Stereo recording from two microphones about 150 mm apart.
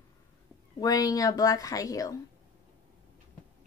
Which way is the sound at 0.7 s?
25° left (ahead or behind).